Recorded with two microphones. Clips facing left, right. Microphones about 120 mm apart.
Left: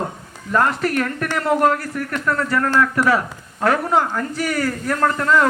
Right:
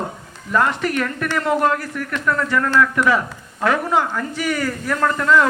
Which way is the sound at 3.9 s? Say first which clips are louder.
Left 1 dB; 25° left (ahead or behind).